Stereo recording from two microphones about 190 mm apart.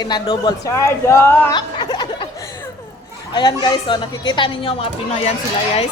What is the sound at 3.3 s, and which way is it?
Speech, 25° left (ahead or behind).